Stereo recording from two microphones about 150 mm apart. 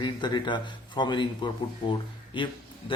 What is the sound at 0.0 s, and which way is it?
Speech, 30° left (ahead or behind).